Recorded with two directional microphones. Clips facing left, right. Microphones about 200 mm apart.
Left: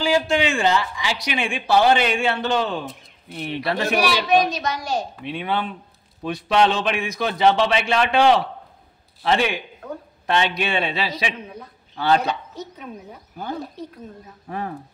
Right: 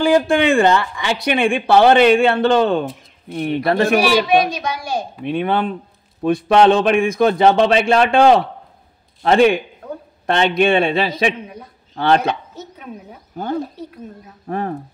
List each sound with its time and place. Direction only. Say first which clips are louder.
0.0 s a woman's voice: right 6 dB; 55° right (ahead or behind)
4.5 s a child's voice: right 2 dB; 10° right (ahead or behind)
5.2 s a man's voice: right 7 dB; 50° right (ahead or behind)
11.4 s a child's voice: right 2 dB; 10° right (ahead or behind)
11.9 s speech: right 4 dB; 55° right (ahead or behind)
12.5 s speech: right 1 dB; 5° right (ahead or behind)
14.5 s a man's voice: right 6 dB; 50° right (ahead or behind)